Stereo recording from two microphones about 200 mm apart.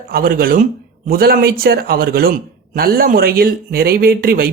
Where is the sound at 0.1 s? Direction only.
45° right (ahead or behind).